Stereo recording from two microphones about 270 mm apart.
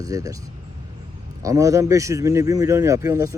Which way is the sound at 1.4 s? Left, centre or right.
Centre.